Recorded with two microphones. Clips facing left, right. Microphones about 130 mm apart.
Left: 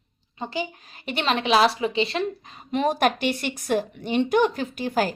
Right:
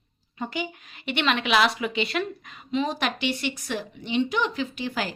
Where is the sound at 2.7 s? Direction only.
55° left (ahead or behind).